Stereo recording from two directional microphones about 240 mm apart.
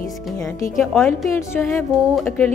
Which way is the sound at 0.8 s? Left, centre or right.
Centre.